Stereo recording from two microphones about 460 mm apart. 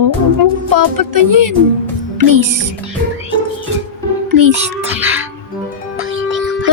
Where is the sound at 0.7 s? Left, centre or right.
Right.